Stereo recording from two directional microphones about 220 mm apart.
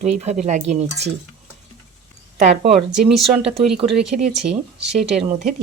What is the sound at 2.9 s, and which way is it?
Speech, centre (ahead or behind).